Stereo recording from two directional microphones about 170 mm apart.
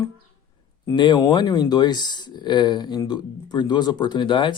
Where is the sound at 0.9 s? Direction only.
25° left (ahead or behind).